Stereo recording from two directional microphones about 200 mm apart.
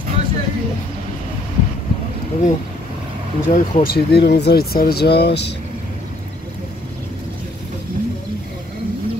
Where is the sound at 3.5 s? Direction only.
45° left (ahead or behind).